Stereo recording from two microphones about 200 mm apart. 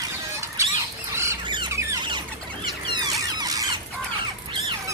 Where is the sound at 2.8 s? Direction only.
20° right (ahead or behind).